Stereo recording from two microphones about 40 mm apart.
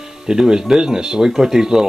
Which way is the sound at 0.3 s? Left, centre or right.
Right.